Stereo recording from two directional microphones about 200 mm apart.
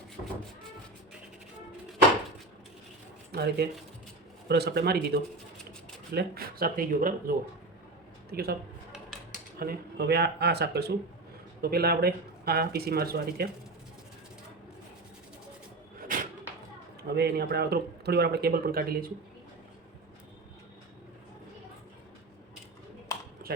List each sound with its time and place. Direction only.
3.3 s a man's voice: 55° right (ahead or behind)
9.6 s speech: 50° right (ahead or behind)
16.0 s cupboard open or close: 40° right (ahead or behind)
17.0 s speech: 55° right (ahead or behind)